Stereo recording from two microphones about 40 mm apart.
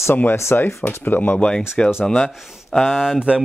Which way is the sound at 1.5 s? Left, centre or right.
Centre.